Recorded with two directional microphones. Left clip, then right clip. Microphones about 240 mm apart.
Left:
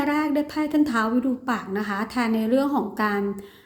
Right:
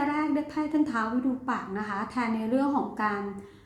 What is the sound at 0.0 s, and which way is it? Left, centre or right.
A woman's voice, left.